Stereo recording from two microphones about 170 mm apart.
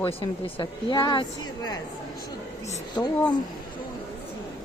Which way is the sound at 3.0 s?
25° left (ahead or behind).